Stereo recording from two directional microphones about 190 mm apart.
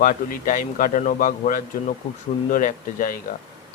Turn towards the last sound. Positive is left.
turn(degrees=45)  # may be behind; listen again after turning